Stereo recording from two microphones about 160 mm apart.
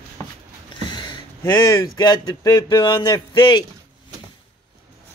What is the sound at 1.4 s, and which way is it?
Speech, 15° left (ahead or behind).